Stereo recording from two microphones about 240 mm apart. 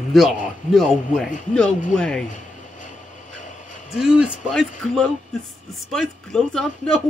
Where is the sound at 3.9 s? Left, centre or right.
Centre.